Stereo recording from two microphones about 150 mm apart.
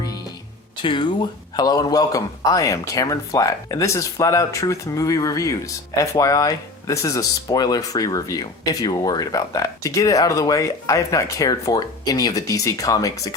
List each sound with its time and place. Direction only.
0.8 s a man's voice: 30° left (ahead or behind)